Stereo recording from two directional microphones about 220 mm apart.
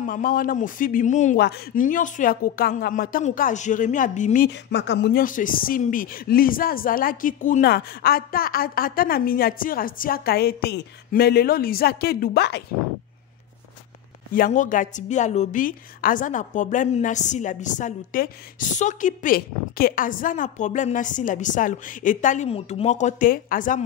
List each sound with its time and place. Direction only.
0.0 s a woman's voice: 40° left (ahead or behind)
4.5 s a woman's voice: 50° left (ahead or behind)
14.3 s a woman's voice: 35° left (ahead or behind)